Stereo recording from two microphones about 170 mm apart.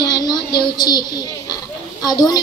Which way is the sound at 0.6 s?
25° left (ahead or behind).